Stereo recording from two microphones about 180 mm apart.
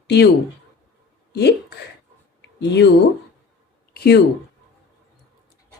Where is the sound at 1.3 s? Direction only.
65° left (ahead or behind).